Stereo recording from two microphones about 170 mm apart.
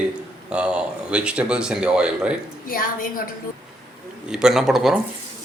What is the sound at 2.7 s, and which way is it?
Speech, 55° left (ahead or behind).